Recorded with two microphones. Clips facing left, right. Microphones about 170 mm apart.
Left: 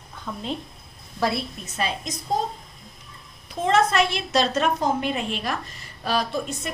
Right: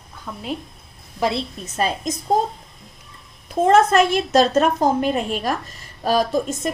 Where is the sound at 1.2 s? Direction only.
20° right (ahead or behind).